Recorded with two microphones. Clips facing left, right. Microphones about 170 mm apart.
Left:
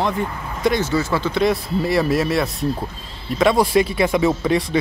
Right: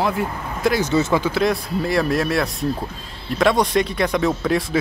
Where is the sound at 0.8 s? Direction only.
20° right (ahead or behind).